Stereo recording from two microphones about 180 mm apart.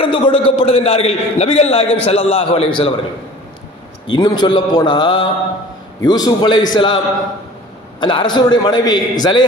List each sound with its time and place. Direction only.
0.0 s a man's voice: 30° left (ahead or behind)
4.1 s a man's voice: 25° left (ahead or behind)
8.0 s a man's voice: 25° left (ahead or behind)